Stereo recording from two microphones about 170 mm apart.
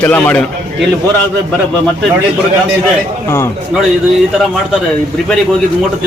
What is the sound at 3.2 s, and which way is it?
Speech, 15° left (ahead or behind).